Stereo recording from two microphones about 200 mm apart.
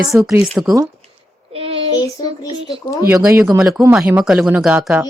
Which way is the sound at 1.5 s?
30° right (ahead or behind).